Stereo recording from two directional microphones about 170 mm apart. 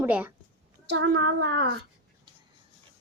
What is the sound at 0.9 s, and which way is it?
Speech, 90° right.